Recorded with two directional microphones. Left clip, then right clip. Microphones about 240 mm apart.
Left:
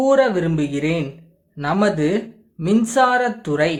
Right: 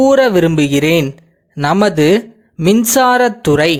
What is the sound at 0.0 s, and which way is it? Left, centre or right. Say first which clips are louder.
Speech: right 6 dB; right.